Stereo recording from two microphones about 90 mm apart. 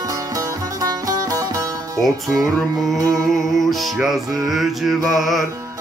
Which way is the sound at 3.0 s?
35° right (ahead or behind).